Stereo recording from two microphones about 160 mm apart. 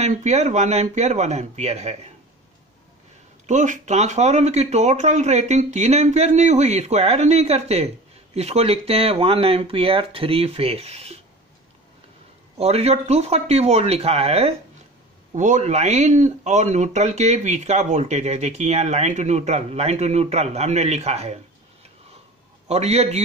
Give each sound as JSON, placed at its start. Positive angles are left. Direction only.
{"t": 0.0, "sound": "speech", "side_deg": -45}
{"t": 3.4, "sound": "speech", "side_deg": -50}
{"t": 12.5, "sound": "speech", "side_deg": -40}
{"t": 15.3, "sound": "speech", "side_deg": -50}
{"t": 22.7, "sound": "speech", "side_deg": -40}